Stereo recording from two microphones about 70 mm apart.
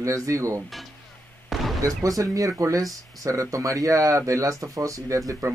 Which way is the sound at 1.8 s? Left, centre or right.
Right.